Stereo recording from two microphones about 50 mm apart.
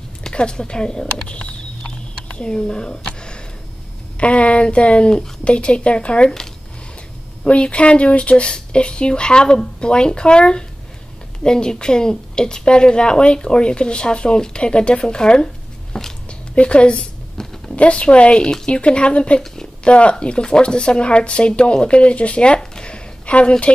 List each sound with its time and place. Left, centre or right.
0.2 s speech: centre
3.1 s a sound: centre
4.2 s speech: left
7.4 s a woman's voice: left
16.5 s a sound: left
17.7 s speech: left
19.4 s speech: centre